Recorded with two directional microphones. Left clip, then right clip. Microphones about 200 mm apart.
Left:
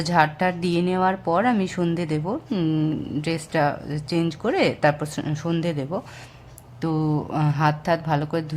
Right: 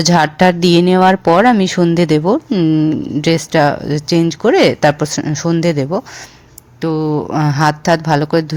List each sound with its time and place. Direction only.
0.0 s speech: 35° right (ahead or behind)